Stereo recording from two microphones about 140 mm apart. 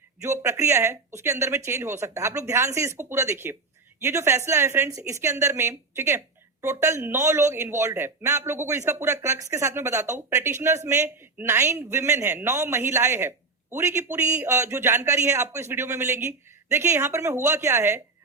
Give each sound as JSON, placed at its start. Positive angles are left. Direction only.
{"t": 0.2, "sound": "a woman's voice", "side_deg": -20}